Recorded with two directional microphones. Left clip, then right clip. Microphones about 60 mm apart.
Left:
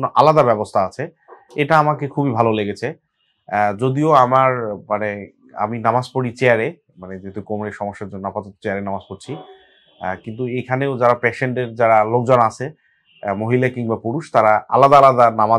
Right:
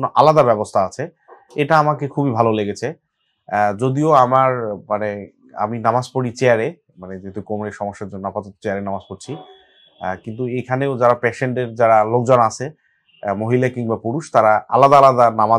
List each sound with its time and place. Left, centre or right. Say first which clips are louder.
0.0 s speech: even; right
14.8 s speech: even; right